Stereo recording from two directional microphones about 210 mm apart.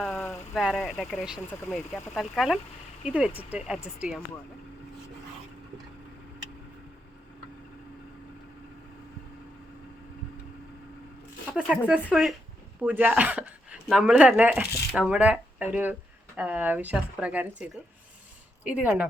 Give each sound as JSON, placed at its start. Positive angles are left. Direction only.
{"t": 0.0, "sound": "a sound", "side_deg": 10}
{"t": 0.6, "sound": "speech", "side_deg": 0}
{"t": 11.5, "sound": "speech", "side_deg": -5}